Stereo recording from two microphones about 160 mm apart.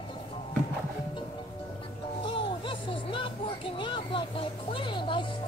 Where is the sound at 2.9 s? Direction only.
30° left (ahead or behind).